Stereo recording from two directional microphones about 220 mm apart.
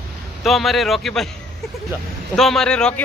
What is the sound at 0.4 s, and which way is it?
Speech, centre (ahead or behind).